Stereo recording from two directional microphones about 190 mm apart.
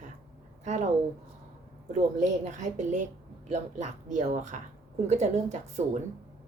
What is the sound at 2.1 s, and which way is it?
A woman's voice, 40° right (ahead or behind).